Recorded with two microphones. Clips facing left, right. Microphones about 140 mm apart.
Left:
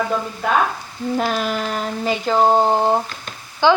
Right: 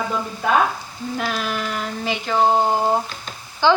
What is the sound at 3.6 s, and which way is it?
Speech, 15° left (ahead or behind).